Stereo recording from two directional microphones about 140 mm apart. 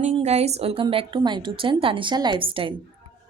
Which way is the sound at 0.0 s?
50° right (ahead or behind).